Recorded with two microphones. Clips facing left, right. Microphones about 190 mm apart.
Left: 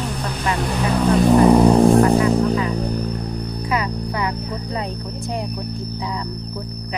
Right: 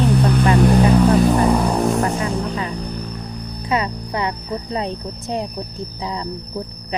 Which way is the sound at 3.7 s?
25° right (ahead or behind).